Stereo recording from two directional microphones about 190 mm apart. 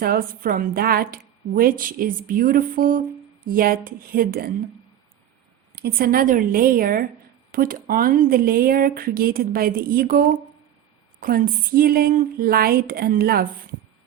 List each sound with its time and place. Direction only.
0.0 s a woman's voice: 50° right (ahead or behind)
5.7 s a woman's voice: 55° right (ahead or behind)